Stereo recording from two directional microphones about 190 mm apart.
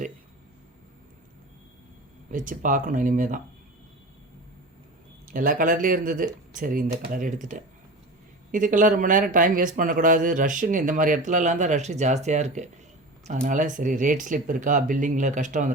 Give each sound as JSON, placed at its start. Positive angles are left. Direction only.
{"t": 2.3, "sound": "speech", "side_deg": -45}
{"t": 5.3, "sound": "speech", "side_deg": -45}